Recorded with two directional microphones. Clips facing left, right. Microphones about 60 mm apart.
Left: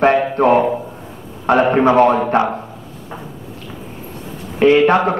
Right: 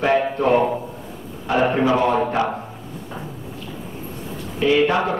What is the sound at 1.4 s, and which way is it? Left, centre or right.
A man's voice, left.